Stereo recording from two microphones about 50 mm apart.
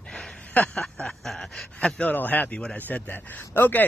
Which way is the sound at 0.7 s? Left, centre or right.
Centre.